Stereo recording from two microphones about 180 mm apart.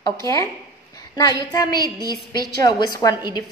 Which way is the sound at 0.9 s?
20° left (ahead or behind).